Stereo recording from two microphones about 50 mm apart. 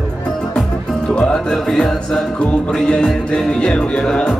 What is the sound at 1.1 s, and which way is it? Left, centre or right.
Music, left.